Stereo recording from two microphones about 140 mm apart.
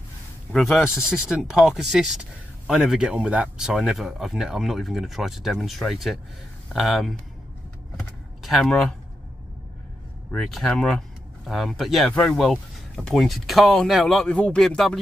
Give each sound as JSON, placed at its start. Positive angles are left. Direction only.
{"t": 0.5, "sound": "speech", "side_deg": 0}
{"t": 8.0, "sound": "a sound", "side_deg": 0}
{"t": 10.3, "sound": "speech", "side_deg": 5}